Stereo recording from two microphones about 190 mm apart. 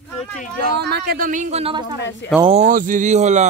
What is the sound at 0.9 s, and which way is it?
Speech, 50° right (ahead or behind).